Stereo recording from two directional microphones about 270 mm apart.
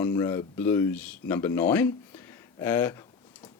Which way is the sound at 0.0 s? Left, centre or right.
Centre.